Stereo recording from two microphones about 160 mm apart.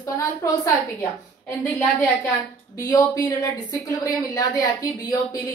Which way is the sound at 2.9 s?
25° left (ahead or behind).